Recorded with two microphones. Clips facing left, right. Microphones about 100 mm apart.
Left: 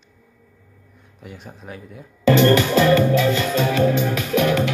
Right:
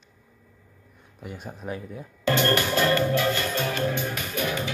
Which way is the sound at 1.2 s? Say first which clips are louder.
Right 1 dB; 5° right (ahead or behind).